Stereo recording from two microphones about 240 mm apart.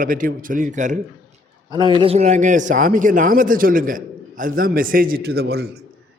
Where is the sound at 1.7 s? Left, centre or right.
Centre.